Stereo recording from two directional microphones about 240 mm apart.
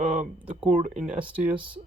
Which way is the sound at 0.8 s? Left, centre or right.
Right.